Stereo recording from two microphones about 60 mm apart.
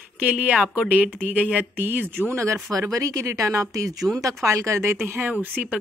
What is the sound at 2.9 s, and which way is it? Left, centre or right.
Speech, right.